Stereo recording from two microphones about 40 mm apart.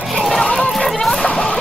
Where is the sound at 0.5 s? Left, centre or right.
Centre.